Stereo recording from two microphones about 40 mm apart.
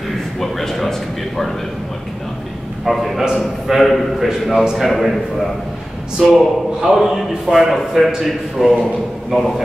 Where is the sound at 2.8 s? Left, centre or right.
Centre.